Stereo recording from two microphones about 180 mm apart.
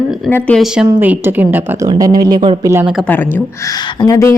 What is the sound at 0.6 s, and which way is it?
A woman's voice, 5° right (ahead or behind).